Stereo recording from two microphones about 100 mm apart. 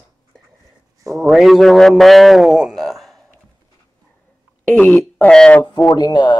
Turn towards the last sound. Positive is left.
turn(degrees=45)  # may be behind; listen again after turning